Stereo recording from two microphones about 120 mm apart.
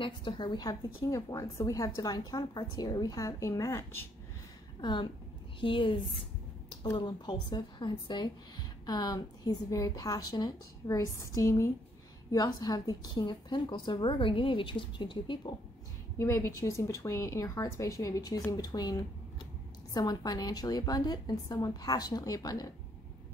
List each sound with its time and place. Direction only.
0.0 s a woman's voice: 40° left (ahead or behind); by 4.0 s 25° left (ahead or behind)
4.8 s a woman's voice: 40° left (ahead or behind)
7.0 s speech: 40° left (ahead or behind)
16.2 s a woman's voice: 20° left (ahead or behind)